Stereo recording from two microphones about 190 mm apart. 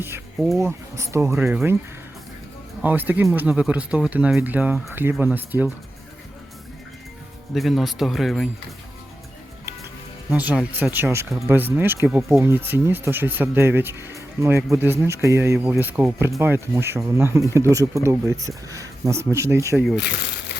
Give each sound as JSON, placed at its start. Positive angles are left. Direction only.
{"t": 0.3, "sound": "speech", "side_deg": 0}
{"t": 0.6, "sound": "speech", "side_deg": -15}
{"t": 1.5, "sound": "speech", "side_deg": -5}
{"t": 2.8, "sound": "speech", "side_deg": -10}
{"t": 7.5, "sound": "speech", "side_deg": 0}
{"t": 10.2, "sound": "speech", "side_deg": -5}